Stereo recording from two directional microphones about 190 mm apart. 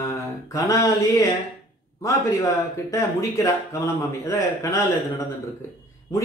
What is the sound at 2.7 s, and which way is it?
Speech, 15° left (ahead or behind).